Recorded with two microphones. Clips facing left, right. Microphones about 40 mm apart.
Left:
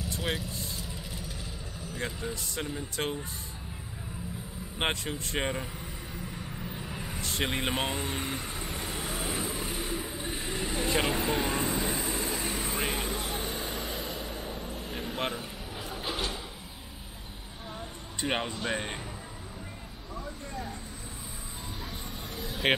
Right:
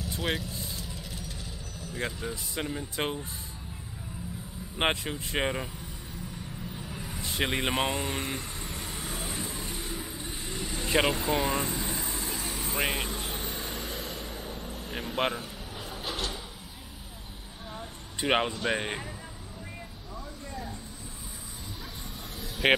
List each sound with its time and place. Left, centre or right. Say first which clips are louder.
0.1 s vehicle: right 2 dB; centre
2.5 s speech: right 1 dB; centre
4.7 s speech: right 3 dB; centre
6.3 s vehicle: left 1 dB; centre
7.2 s vehicle: right 2 dB; centre
10.9 s speech: right 4 dB; centre
11.1 s vehicle: right 1 dB; centre
15.0 s vehicle: right 4 dB; centre
15.8 s drawer open or close: left 1 dB; centre
18.2 s speech: right 5 dB; right
18.5 s speech: right 3 dB; centre
18.8 s speech: right 3 dB; centre
22.6 s speech: right 3 dB; centre